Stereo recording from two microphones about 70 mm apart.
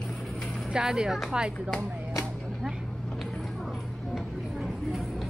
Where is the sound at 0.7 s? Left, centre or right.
Centre.